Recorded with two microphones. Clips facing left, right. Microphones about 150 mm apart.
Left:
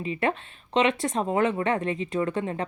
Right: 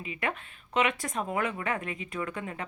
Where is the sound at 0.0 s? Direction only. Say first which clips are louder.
Left 7 dB; 30° left (ahead or behind).